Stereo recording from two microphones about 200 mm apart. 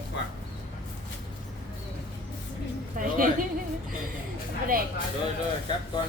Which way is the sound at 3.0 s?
40° right (ahead or behind).